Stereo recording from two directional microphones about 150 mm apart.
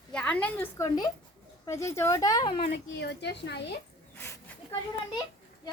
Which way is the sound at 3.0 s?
90° left.